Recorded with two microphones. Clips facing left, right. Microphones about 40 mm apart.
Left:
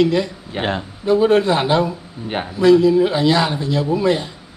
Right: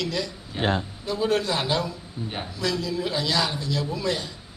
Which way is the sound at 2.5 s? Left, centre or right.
Left.